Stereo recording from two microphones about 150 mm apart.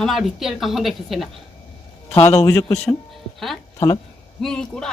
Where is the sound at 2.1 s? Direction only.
20° left (ahead or behind).